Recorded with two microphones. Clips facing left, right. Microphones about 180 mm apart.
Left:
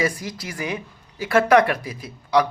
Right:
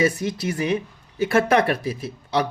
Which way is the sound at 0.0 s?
25° right (ahead or behind).